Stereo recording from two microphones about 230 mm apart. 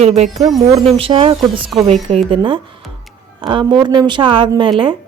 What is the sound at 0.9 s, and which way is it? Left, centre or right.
Speech, right.